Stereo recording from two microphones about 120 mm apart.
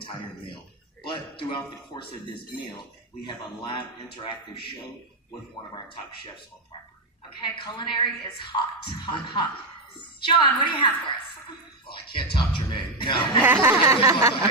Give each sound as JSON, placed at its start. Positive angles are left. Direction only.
{"t": 0.0, "sound": "a sound", "side_deg": 45}
{"t": 1.0, "sound": "a man's voice", "side_deg": 45}
{"t": 5.7, "sound": "a man's voice", "side_deg": 45}
{"t": 7.4, "sound": "a woman's voice", "side_deg": 40}
{"t": 11.9, "sound": "a man's voice", "side_deg": 45}
{"t": 13.4, "sound": "a sound", "side_deg": -20}